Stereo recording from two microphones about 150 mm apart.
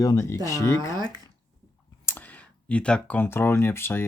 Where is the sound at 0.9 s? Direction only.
25° right (ahead or behind).